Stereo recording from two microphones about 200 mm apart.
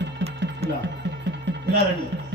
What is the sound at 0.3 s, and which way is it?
Music, 60° right (ahead or behind).